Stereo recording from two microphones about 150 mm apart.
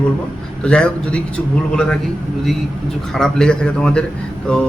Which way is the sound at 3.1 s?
5° left (ahead or behind).